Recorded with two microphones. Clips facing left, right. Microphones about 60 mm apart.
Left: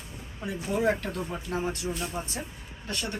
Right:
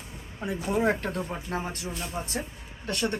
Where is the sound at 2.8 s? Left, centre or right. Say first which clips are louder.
Right 5 dB; right.